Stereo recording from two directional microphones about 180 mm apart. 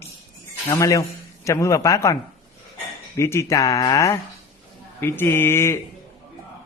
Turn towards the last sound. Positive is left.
turn(degrees=15)  # may be behind; listen again after turning